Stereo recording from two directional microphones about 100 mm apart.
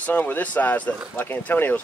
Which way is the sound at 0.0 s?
15° left (ahead or behind).